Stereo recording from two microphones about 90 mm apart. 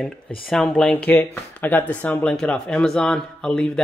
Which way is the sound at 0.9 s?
20° left (ahead or behind).